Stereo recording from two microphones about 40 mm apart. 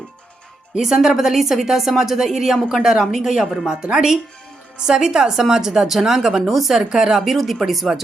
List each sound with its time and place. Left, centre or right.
0.8 s a woman's voice: centre
3.7 s a woman's voice: right
7.3 s speech: centre